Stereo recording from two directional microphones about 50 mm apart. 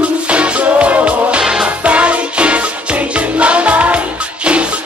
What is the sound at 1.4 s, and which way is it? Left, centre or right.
Music, centre.